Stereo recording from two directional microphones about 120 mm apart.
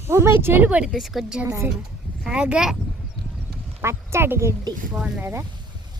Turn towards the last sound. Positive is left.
turn(degrees=-20)  # may be behind; listen again after turning